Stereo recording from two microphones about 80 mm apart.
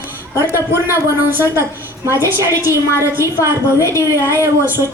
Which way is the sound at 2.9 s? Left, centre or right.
Left.